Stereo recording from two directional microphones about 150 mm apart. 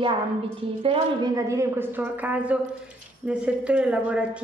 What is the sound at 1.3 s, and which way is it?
A woman's voice, 20° right (ahead or behind).